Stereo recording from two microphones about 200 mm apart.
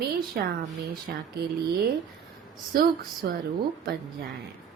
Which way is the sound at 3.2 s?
50° right (ahead or behind).